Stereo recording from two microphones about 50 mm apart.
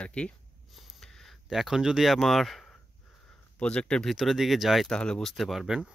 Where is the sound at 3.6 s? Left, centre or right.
Centre.